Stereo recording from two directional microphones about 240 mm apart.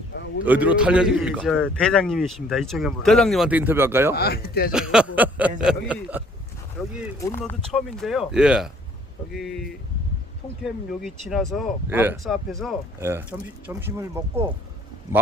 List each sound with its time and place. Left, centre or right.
0.4 s a man's voice: centre
4.1 s speech: left
4.7 s a man's voice: centre
7.2 s a man's voice: centre
11.0 s a man's voice: centre
13.0 s speech: centre